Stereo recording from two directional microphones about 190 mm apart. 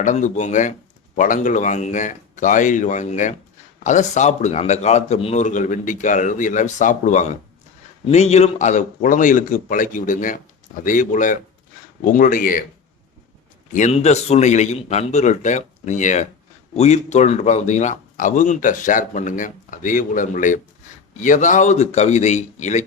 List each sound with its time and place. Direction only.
0.0 s a man's voice: 40° left (ahead or behind)
13.7 s a man's voice: 35° left (ahead or behind)